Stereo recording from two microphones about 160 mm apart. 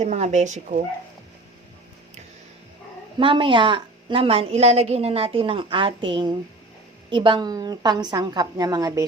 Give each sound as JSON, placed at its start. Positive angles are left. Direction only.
{"t": 0.0, "sound": "speech", "side_deg": -45}
{"t": 3.2, "sound": "a woman's voice", "side_deg": -30}